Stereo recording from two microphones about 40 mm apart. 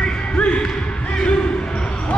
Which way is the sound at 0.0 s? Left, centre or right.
Left.